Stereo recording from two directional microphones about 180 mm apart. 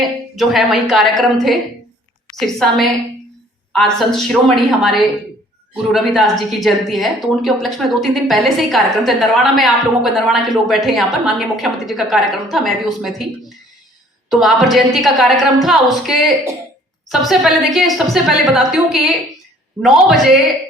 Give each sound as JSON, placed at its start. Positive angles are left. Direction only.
{"t": 0.0, "sound": "a woman's voice", "side_deg": 0}
{"t": 14.3, "sound": "a woman's voice", "side_deg": 0}